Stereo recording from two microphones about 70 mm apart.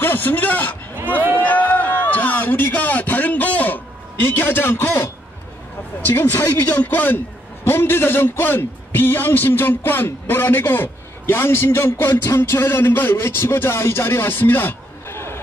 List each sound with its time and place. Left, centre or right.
0.0 s speech: left
1.4 s a sound: left
4.4 s a man's voice: left